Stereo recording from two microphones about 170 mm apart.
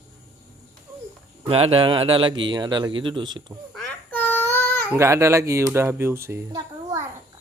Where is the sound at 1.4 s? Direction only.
35° right (ahead or behind).